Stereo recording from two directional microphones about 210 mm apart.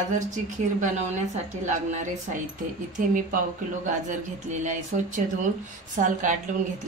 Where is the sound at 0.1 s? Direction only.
35° right (ahead or behind).